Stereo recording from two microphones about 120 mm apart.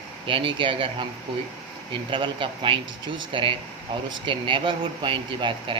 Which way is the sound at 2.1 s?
45° right (ahead or behind).